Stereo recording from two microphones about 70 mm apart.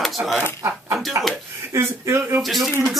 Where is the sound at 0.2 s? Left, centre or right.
Right.